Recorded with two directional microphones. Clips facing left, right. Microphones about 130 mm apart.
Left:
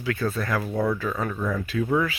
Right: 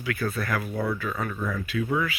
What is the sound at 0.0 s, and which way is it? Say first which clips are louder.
Speech: left 2 dB; 30° left (ahead or behind).